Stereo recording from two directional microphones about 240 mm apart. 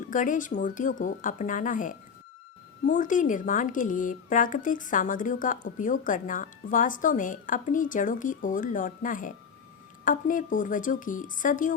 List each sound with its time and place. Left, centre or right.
0.1 s a woman's voice: left